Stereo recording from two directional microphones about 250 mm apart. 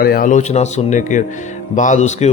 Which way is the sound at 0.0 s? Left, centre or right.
Left.